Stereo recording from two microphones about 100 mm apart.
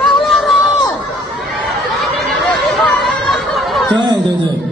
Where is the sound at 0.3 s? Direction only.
Centre (ahead or behind).